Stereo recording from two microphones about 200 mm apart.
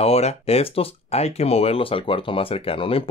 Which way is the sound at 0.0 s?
30° left (ahead or behind).